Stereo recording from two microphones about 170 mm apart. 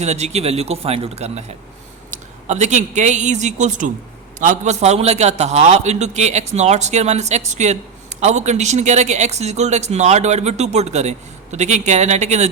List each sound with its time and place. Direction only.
0.0 s a man's voice: 40° right (ahead or behind)